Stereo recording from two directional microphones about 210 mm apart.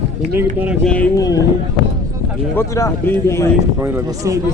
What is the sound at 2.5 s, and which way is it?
Speech, 15° left (ahead or behind).